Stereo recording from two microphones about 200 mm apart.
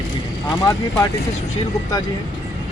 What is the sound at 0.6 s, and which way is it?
Speech, 15° left (ahead or behind).